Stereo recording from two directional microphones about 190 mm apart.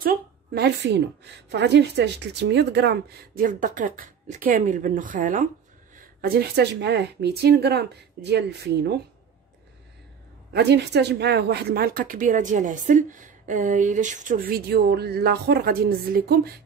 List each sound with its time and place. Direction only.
0.0 s speech: 55° right (ahead or behind)
5.9 s speech: 55° right (ahead or behind)
10.5 s speech: 60° right (ahead or behind)